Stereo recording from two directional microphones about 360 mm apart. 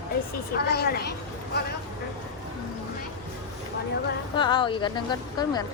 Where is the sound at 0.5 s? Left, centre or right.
Left.